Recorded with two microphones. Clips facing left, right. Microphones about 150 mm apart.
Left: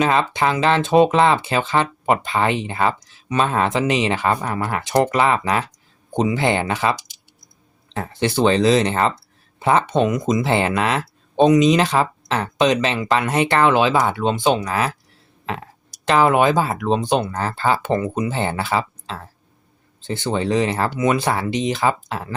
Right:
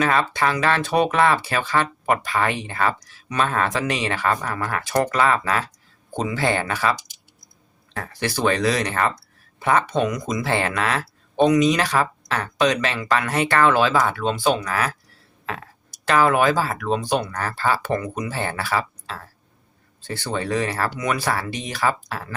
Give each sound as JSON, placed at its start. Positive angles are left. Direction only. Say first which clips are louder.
{"t": 0.0, "sound": "speech", "louder": "left 2 dB", "side_deg": 20}
{"t": 7.9, "sound": "speech", "louder": "left 6 dB", "side_deg": 20}